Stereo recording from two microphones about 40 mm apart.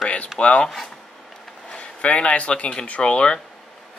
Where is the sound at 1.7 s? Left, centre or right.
Left.